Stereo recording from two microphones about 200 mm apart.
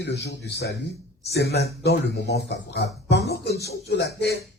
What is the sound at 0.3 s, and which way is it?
Speech, 55° left (ahead or behind).